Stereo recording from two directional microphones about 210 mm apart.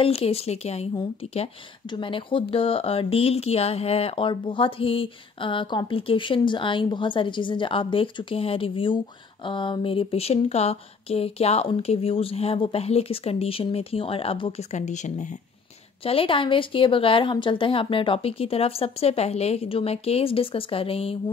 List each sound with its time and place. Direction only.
0.0 s a woman's voice: 30° left (ahead or behind)